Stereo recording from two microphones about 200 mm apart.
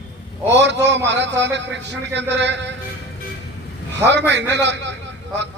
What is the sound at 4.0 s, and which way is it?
Speech, 60° right (ahead or behind).